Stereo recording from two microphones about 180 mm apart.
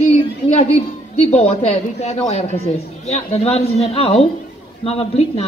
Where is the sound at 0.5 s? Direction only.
40° left (ahead or behind).